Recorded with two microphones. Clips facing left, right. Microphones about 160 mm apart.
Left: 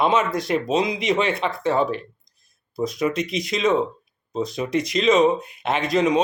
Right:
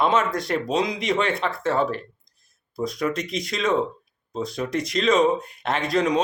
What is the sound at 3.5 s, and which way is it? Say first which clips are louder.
Speech: left 4 dB; 20° left (ahead or behind).